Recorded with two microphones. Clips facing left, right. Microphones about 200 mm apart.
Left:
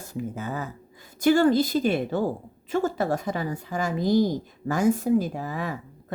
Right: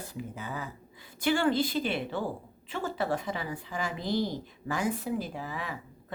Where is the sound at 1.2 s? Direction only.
40° left (ahead or behind).